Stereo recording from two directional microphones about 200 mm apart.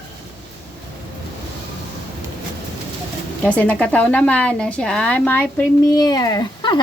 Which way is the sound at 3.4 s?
5° left (ahead or behind).